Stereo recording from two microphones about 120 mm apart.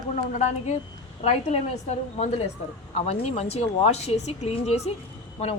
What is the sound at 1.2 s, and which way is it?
Speech, 60° left (ahead or behind).